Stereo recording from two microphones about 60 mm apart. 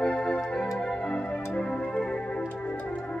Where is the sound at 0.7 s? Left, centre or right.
Centre.